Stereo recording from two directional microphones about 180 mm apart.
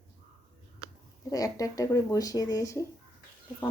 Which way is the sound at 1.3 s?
20° left (ahead or behind).